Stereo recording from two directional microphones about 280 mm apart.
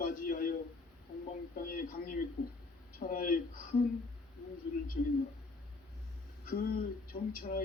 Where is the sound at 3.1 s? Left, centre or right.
Left.